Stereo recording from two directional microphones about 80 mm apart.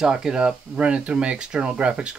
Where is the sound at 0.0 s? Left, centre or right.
Centre.